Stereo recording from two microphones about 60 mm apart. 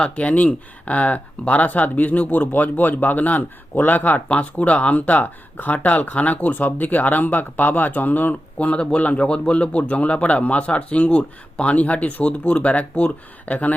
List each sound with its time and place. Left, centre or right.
0.0 s speech: left